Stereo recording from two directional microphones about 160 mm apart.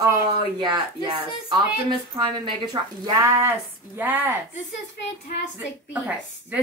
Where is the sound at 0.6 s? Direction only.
25° right (ahead or behind); by 4.3 s 10° right (ahead or behind).